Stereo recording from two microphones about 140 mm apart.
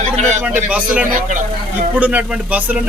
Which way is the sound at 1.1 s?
65° right (ahead or behind).